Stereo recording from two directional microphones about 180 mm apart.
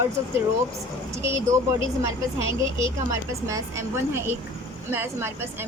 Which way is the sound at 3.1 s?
15° right (ahead or behind).